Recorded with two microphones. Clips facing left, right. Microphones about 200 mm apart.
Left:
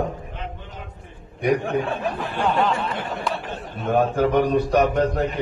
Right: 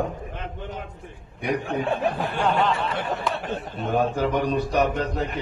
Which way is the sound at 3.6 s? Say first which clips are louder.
Left 4 dB; 55° left (ahead or behind).